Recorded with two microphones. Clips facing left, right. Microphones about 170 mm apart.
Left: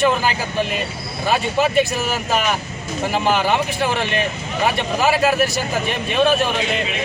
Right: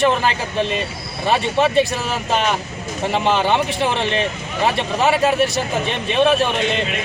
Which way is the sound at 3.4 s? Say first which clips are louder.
Right 1 dB; 30° right (ahead or behind).